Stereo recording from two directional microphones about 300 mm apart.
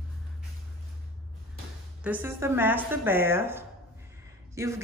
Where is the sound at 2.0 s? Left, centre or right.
Centre.